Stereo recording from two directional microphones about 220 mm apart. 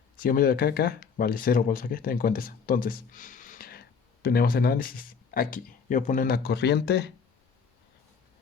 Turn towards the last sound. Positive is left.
turn(degrees=50)  # may be behind; listen again after turning